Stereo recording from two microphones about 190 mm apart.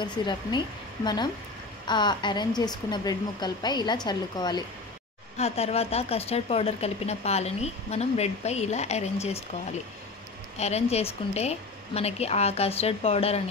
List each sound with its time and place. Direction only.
0.0 s a woman's voice: 25° left (ahead or behind)
5.4 s speech: 35° left (ahead or behind)
10.6 s speech: 35° left (ahead or behind)